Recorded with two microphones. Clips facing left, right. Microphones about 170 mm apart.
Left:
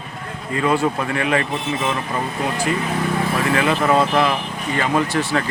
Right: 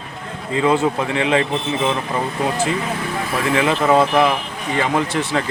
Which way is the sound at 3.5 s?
20° right (ahead or behind).